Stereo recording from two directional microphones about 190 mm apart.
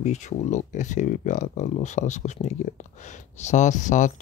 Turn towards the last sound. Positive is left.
turn(degrees=40)  # may be behind; listen again after turning